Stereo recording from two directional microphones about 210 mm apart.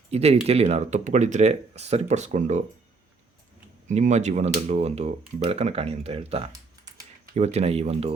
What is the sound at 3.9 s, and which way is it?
Speech, 35° right (ahead or behind).